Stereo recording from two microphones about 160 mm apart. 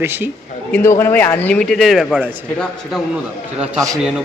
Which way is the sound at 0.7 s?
15° left (ahead or behind).